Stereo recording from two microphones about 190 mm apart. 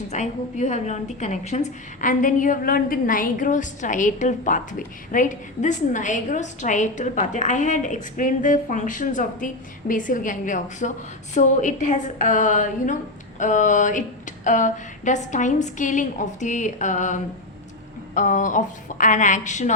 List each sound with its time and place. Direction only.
0.1 s a woman's voice: 40° left (ahead or behind)